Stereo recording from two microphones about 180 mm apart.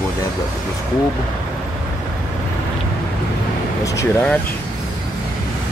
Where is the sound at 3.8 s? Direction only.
15° left (ahead or behind).